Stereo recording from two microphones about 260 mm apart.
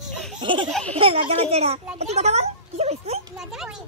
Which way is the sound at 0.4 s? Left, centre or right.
Centre.